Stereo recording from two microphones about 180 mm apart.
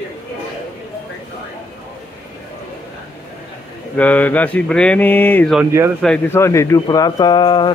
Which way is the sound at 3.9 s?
10° left (ahead or behind).